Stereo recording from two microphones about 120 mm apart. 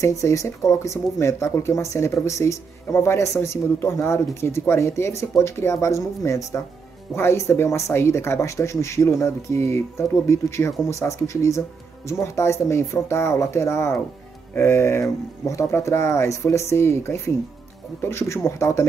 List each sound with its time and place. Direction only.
0.0 s speech: 25° left (ahead or behind)